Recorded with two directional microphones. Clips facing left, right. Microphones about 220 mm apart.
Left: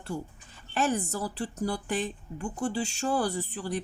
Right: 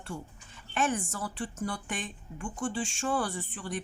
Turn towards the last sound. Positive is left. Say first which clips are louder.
# left 5 dB
turn(degrees=40)  # may be behind; listen again after turning